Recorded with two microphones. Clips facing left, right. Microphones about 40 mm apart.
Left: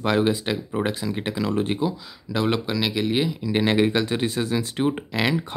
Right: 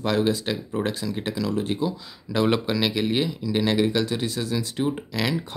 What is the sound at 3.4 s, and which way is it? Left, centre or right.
Speech, left.